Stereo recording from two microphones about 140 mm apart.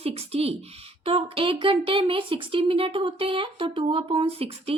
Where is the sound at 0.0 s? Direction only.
45° right (ahead or behind).